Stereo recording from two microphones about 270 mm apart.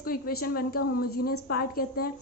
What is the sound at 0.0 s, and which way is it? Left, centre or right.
A woman's voice, left.